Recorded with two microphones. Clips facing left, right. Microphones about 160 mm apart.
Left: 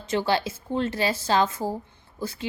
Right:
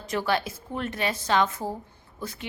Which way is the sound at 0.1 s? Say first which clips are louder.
Left 2 dB; 30° left (ahead or behind).